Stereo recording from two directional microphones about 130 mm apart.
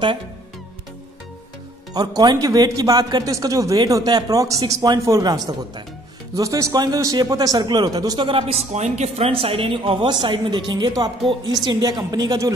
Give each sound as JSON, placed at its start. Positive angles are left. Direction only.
{"t": 2.0, "sound": "a man's voice", "side_deg": -30}
{"t": 8.3, "sound": "speech", "side_deg": -45}
{"t": 8.7, "sound": "speech", "side_deg": -60}